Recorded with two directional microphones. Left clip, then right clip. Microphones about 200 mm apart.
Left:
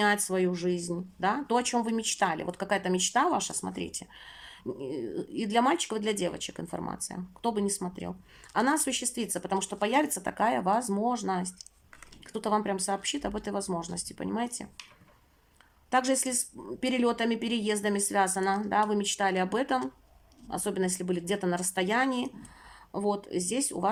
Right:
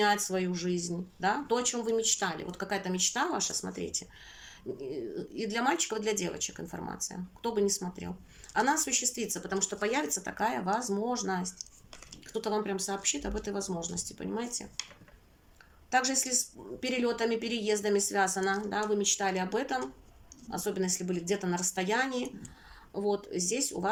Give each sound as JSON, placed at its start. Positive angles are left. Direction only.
{"t": 0.0, "sound": "speech", "side_deg": 40}
{"t": 15.9, "sound": "speech", "side_deg": 40}